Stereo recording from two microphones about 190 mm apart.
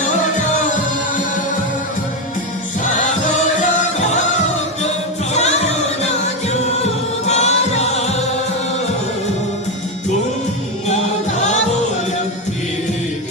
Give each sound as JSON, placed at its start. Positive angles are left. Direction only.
{"t": 5.3, "sound": "music", "side_deg": 35}
{"t": 7.3, "sound": "music", "side_deg": 35}